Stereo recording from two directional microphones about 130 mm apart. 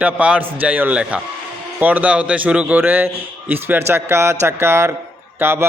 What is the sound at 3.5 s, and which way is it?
Mantra, 15° right (ahead or behind).